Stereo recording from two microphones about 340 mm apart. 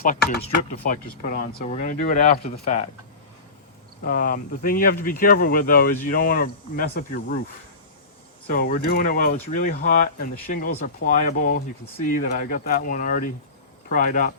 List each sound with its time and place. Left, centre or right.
0.0 s speech: left
4.0 s speech: left